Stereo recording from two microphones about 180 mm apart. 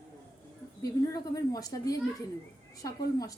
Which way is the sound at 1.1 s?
20° left (ahead or behind).